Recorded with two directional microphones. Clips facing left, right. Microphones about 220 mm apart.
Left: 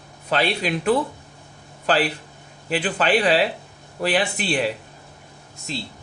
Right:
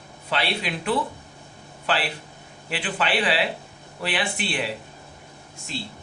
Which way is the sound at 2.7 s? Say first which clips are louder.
Left 6 dB; 40° left (ahead or behind).